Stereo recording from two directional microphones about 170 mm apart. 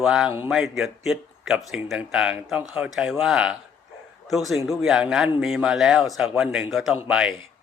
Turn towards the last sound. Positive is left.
turn(degrees=-5)  # may be behind; listen again after turning